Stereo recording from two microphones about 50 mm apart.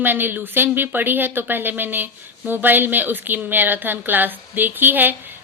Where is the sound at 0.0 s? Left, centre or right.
Right.